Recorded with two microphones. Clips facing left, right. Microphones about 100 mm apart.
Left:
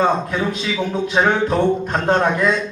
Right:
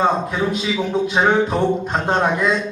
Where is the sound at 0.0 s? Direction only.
5° right (ahead or behind).